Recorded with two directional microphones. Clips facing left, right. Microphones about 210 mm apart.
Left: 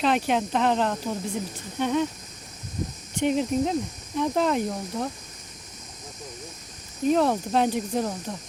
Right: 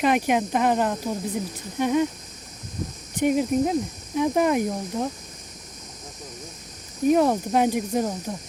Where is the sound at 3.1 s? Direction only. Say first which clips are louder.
Right 2 dB; 10° right (ahead or behind).